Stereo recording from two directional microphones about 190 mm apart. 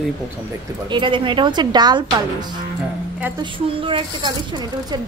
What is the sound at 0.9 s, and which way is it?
Speech, 25° right (ahead or behind).